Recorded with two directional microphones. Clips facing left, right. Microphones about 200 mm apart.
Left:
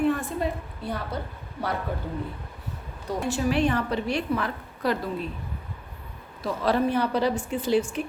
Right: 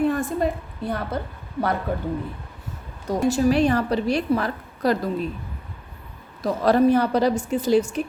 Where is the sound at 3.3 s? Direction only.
40° right (ahead or behind).